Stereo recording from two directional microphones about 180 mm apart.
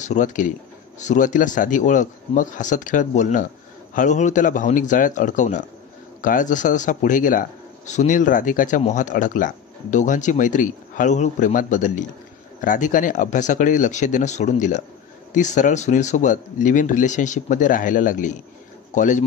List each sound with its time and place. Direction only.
0.0 s speech: 45° left (ahead or behind)